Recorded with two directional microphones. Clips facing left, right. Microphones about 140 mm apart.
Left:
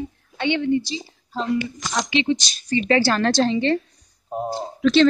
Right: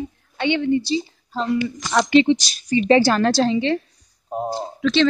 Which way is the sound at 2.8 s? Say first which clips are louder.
Right 4 dB; 20° right (ahead or behind).